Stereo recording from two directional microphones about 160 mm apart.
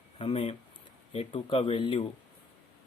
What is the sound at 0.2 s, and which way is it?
Speech, 35° left (ahead or behind).